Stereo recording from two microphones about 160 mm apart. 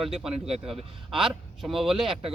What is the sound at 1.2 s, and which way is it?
Speech, centre (ahead or behind).